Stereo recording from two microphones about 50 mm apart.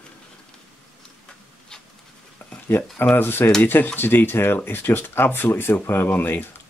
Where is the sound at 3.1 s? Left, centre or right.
Left.